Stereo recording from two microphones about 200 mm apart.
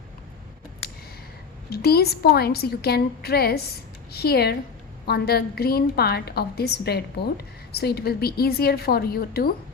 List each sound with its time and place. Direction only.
1.7 s a woman's voice: 50° left (ahead or behind)